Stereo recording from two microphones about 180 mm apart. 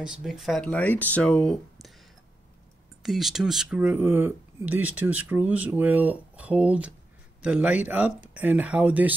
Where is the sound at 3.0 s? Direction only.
Centre (ahead or behind).